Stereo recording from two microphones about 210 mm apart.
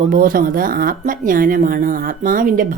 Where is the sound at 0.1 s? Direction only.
40° right (ahead or behind).